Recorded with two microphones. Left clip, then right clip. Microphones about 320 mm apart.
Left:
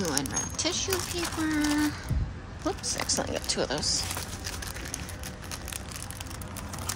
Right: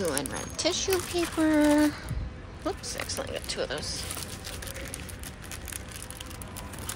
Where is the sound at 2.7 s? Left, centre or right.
Centre.